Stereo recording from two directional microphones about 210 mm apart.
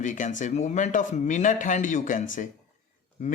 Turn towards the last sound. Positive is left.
turn(degrees=35)  # may be behind; listen again after turning